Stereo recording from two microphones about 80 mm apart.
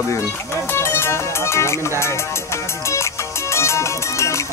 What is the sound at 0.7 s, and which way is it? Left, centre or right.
Music, left.